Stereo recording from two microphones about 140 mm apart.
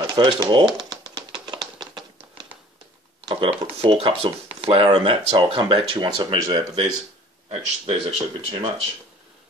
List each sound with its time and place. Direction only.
0.0 s a sound: 30° right (ahead or behind)
3.3 s speech: 40° right (ahead or behind)
7.4 s speech: 45° right (ahead or behind)